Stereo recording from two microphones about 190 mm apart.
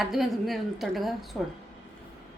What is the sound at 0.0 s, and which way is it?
Speech, centre (ahead or behind).